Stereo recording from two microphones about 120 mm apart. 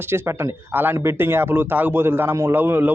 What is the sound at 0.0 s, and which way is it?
A man's voice, 20° right (ahead or behind).